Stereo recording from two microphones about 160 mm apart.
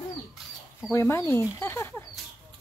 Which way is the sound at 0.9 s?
15° left (ahead or behind).